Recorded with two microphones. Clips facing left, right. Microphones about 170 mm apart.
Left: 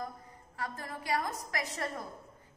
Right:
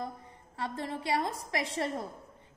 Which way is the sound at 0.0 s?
25° right (ahead or behind).